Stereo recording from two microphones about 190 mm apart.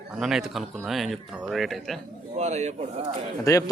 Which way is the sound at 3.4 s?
15° left (ahead or behind).